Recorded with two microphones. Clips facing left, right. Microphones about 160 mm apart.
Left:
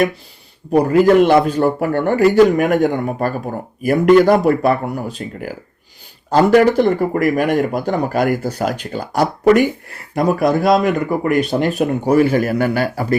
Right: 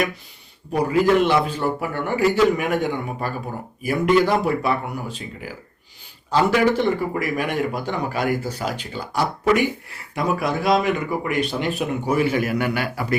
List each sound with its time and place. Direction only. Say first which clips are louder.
0.7 s speech: left 6 dB; 50° left (ahead or behind)